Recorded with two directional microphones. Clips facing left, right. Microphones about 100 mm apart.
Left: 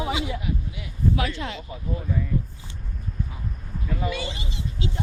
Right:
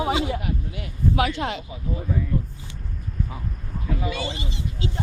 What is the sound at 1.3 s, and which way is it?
Speech, 70° right (ahead or behind).